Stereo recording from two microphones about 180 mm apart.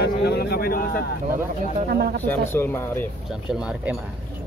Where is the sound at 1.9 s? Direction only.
60° right (ahead or behind).